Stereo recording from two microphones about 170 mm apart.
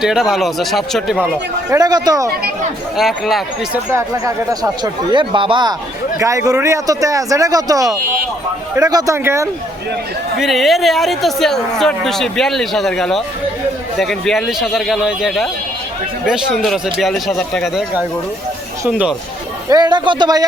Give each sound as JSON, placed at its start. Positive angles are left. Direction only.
{"t": 0.0, "sound": "speech", "side_deg": 0}
{"t": 1.7, "sound": "speech", "side_deg": -20}
{"t": 3.0, "sound": "speech", "side_deg": 0}
{"t": 4.6, "sound": "speech", "side_deg": -25}
{"t": 10.4, "sound": "speech", "side_deg": 0}
{"t": 18.9, "sound": "speech", "side_deg": -5}
{"t": 19.6, "sound": "speech", "side_deg": -25}